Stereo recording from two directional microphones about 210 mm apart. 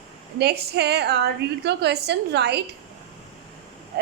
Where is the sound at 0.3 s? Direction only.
50° right (ahead or behind).